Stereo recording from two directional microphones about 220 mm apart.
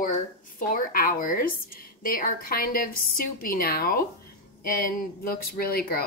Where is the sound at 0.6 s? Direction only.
40° left (ahead or behind).